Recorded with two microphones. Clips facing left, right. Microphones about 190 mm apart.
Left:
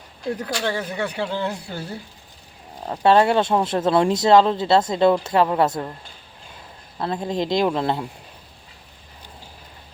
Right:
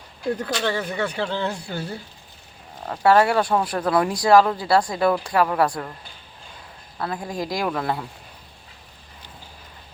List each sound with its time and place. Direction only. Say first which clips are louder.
0.6 s speech: even; 10° left (ahead or behind)
2.8 s speech: left 1 dB; 20° left (ahead or behind)
7.0 s speech: left 4 dB; 25° left (ahead or behind)